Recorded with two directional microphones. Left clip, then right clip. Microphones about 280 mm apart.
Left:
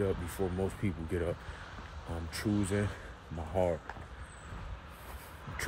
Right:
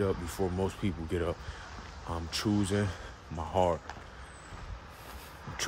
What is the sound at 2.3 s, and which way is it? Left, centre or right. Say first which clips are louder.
Speech: right 2 dB; centre.